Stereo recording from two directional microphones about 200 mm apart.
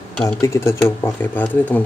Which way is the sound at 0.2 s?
10° left (ahead or behind).